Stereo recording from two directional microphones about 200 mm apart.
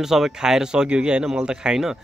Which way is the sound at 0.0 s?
Centre (ahead or behind).